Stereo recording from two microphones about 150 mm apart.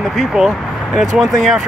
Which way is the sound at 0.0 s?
Centre (ahead or behind).